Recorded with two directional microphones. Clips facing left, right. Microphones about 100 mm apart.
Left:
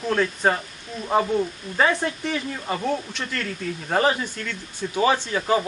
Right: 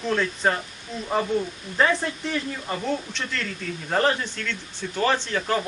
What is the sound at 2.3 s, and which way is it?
Speech, 10° left (ahead or behind).